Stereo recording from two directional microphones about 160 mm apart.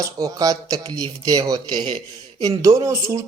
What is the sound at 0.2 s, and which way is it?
Speech, 20° right (ahead or behind).